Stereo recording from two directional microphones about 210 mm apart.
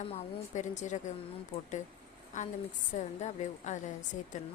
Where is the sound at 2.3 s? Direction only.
35° left (ahead or behind).